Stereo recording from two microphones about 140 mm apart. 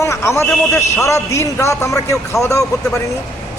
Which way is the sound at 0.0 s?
20° left (ahead or behind).